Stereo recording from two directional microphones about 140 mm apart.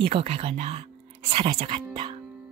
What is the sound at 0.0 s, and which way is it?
Speech, 45° right (ahead or behind).